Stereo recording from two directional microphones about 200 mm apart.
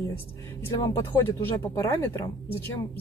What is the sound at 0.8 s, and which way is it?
Speech, 15° left (ahead or behind).